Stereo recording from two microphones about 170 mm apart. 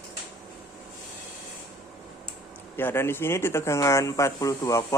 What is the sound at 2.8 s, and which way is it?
Speech, 15° left (ahead or behind).